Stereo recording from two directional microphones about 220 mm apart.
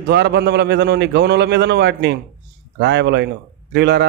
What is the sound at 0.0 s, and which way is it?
A man's voice, 50° right (ahead or behind).